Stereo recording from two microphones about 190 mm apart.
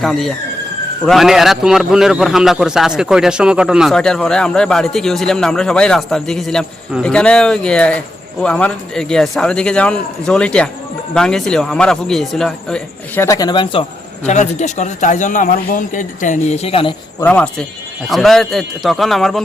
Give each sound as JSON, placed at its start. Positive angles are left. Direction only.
{"t": 0.0, "sound": "a man's voice", "side_deg": 0}
{"t": 13.2, "sound": "speech", "side_deg": 20}
{"t": 14.3, "sound": "a man's voice", "side_deg": 40}
{"t": 17.2, "sound": "a man's voice", "side_deg": 10}